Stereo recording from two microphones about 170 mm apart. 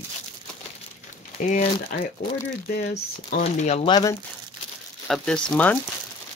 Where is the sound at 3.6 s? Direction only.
45° left (ahead or behind).